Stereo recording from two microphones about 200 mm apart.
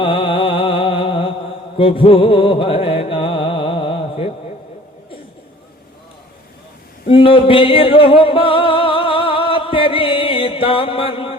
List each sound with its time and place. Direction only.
0.0 s music: 25° left (ahead or behind)
7.1 s music: 25° left (ahead or behind)